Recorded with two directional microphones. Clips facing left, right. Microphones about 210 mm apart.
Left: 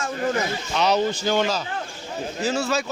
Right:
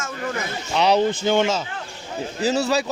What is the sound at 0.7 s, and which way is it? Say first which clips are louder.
Speech: right 3 dB; 30° right (ahead or behind).